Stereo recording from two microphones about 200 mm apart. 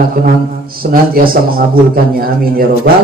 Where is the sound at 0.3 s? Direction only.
45° right (ahead or behind).